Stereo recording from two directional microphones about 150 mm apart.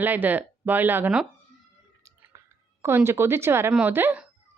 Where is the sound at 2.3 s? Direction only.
20° right (ahead or behind).